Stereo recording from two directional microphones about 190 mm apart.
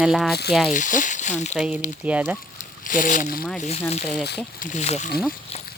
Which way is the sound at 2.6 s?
45° left (ahead or behind).